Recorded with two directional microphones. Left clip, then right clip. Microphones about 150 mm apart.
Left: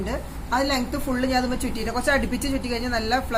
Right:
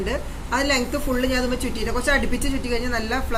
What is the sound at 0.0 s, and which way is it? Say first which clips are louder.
A woman's voice: right 3 dB; 50° left (ahead or behind).